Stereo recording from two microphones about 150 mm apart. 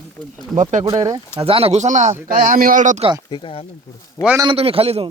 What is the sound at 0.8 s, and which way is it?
Speech, 35° right (ahead or behind).